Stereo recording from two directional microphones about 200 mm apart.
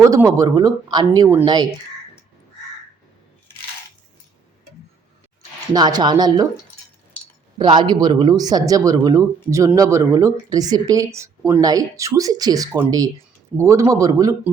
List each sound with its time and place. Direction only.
0.0 s speech: 15° right (ahead or behind)
5.7 s speech: 20° right (ahead or behind)
7.6 s speech: 20° right (ahead or behind)